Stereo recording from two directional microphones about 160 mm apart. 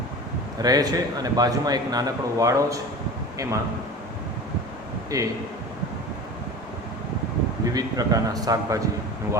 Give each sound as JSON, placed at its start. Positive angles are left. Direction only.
{"t": 0.6, "sound": "a man's voice", "side_deg": -25}
{"t": 5.1, "sound": "a man's voice", "side_deg": -20}
{"t": 7.6, "sound": "a man's voice", "side_deg": -25}